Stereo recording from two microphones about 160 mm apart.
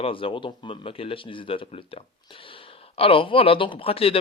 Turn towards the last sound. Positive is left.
turn(degrees=35)  # may be behind; listen again after turning